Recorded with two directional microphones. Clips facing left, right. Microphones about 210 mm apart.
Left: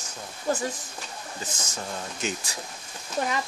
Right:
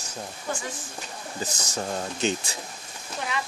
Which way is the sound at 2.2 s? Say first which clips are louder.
Right 5 dB; 25° right (ahead or behind).